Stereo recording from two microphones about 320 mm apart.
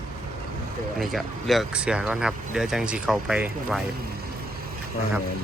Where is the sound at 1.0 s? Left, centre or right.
Centre.